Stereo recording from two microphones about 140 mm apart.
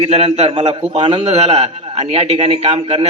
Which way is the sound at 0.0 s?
50° right (ahead or behind).